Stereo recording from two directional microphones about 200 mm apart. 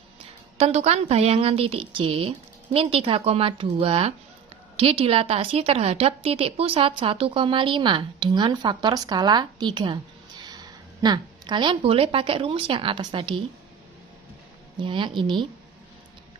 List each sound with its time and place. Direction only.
0.6 s a woman's voice: 35° right (ahead or behind)
14.8 s a woman's voice: 25° right (ahead or behind)